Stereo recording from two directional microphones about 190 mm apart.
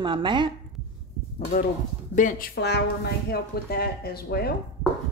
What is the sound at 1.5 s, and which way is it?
A woman's voice, 40° left (ahead or behind).